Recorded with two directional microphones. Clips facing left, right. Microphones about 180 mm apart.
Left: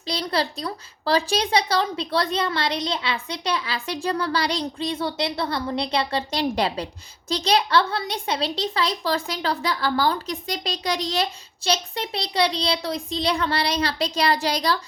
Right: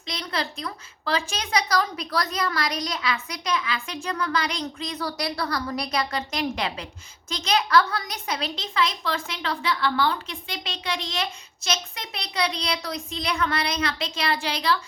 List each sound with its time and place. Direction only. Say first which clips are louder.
0.1 s a woman's voice: left 5 dB; 35° left (ahead or behind)